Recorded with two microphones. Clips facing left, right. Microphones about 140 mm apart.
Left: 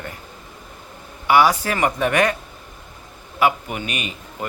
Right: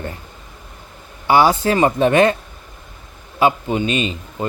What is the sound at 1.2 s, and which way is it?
Speech, 30° right (ahead or behind).